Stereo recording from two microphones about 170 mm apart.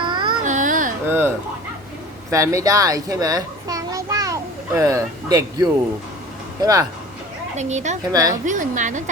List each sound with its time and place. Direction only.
0.1 s baby cry: 25° right (ahead or behind)
0.4 s baby cry: 50° right (ahead or behind)
1.0 s fowl: 15° right (ahead or behind)
2.3 s a child's voice: 15° right (ahead or behind)
7.5 s a woman's voice: 45° right (ahead or behind)
8.1 s a woman's voice: 20° right (ahead or behind)
8.4 s a woman's voice: 50° right (ahead or behind)